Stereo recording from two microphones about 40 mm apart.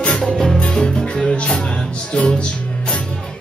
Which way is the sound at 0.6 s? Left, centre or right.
Left.